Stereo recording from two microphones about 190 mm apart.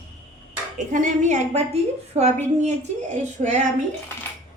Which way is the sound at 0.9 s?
40° right (ahead or behind).